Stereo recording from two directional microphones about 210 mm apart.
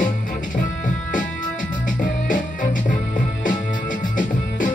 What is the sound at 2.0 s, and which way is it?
Music, 40° left (ahead or behind).